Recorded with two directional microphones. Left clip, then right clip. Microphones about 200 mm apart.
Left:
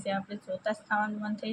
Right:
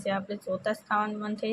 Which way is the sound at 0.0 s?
15° right (ahead or behind).